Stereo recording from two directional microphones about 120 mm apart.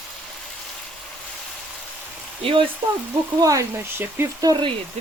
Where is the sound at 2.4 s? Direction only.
50° right (ahead or behind).